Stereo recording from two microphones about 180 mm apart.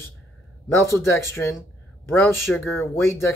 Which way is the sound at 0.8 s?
15° left (ahead or behind).